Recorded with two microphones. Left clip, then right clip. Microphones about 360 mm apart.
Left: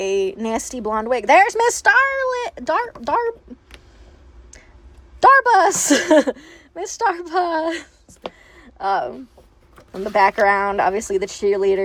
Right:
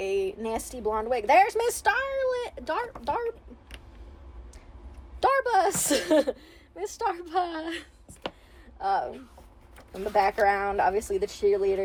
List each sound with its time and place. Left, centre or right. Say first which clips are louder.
0.0 s a woman's voice: left 8 dB; left
5.2 s a woman's voice: left 11 dB; left